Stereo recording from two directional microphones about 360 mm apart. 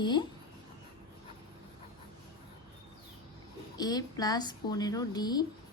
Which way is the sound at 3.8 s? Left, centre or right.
Centre.